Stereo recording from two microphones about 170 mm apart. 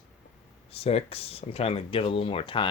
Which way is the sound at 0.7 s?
35° left (ahead or behind).